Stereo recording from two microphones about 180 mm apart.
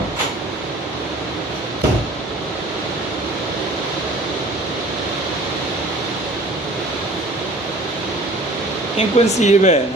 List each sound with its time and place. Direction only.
9.0 s speech: 35° left (ahead or behind)